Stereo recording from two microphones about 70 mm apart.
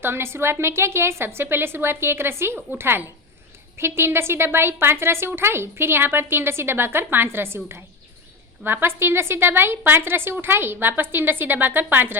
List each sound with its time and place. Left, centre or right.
0.0 s a woman's voice: right